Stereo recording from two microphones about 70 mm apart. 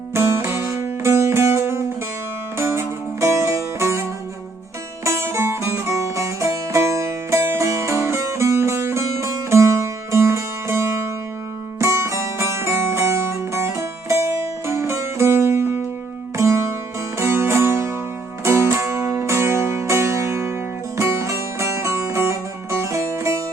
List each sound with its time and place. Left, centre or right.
0.1 s music: right
5.0 s music: right